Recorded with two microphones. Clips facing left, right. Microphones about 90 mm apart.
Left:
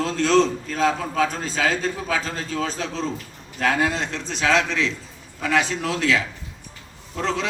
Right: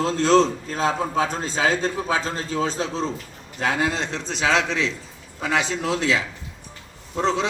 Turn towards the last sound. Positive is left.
turn(degrees=-25)  # may be behind; listen again after turning